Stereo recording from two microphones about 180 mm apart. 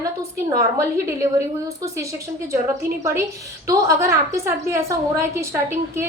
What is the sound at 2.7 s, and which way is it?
A woman's voice, 15° right (ahead or behind).